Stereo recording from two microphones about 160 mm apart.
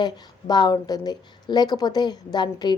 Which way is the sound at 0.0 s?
25° left (ahead or behind).